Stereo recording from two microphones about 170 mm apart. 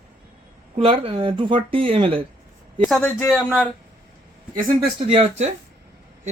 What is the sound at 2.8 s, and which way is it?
Speech, centre (ahead or behind).